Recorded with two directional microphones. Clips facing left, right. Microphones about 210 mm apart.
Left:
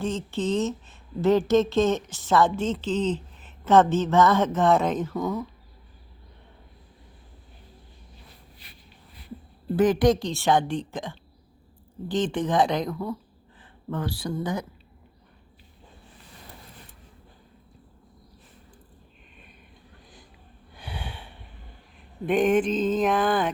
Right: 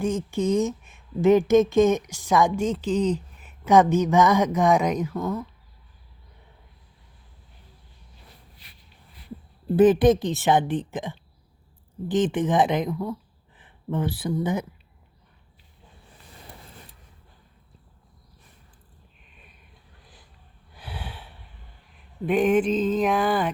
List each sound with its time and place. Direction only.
0.3 s speech: 15° right (ahead or behind)
5.1 s speech: centre (ahead or behind)
9.7 s speech: 25° right (ahead or behind)
12.0 s speech: 50° right (ahead or behind)
12.3 s speech: 20° right (ahead or behind)
13.6 s a sound: 20° right (ahead or behind)
14.2 s speech: 20° right (ahead or behind)
20.7 s snort: 5° right (ahead or behind)
22.3 s speech: 5° right (ahead or behind)